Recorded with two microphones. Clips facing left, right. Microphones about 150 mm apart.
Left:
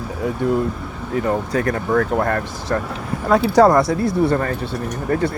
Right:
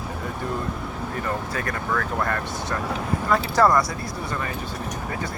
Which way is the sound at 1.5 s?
45° left (ahead or behind).